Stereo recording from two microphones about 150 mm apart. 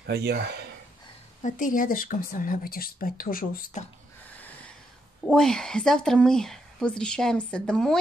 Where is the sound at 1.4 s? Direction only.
60° left (ahead or behind).